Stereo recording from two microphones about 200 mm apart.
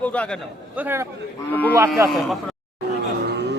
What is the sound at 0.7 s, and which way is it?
Speech, 10° right (ahead or behind).